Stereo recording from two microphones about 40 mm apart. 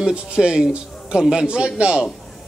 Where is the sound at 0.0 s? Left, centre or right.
Right.